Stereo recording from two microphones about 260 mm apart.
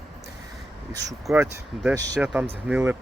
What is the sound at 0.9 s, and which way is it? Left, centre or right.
Speech, centre.